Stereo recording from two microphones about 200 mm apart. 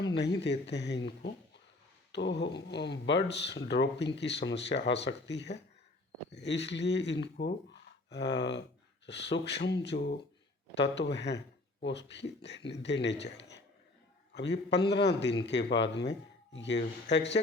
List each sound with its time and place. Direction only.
0.0 s speech: 60° left (ahead or behind)